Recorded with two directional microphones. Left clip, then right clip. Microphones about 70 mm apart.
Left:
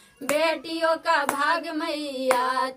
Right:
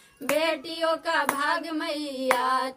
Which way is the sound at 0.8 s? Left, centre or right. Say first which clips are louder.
Left 3 dB; left.